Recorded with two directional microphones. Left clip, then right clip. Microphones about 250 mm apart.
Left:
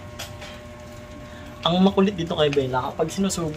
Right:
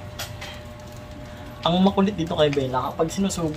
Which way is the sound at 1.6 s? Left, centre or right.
Centre.